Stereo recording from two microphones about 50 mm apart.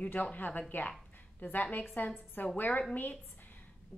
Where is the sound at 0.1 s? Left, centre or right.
Left.